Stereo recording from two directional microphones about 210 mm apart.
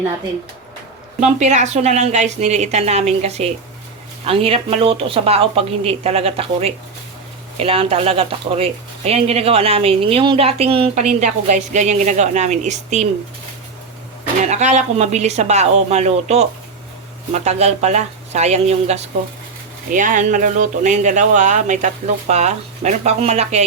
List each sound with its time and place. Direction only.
1.2 s speech: 35° right (ahead or behind)
14.4 s speech: 35° right (ahead or behind)